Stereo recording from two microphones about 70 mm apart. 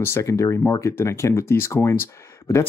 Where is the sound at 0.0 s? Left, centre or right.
Left.